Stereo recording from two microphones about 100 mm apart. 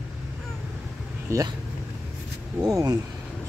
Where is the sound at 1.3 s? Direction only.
30° right (ahead or behind).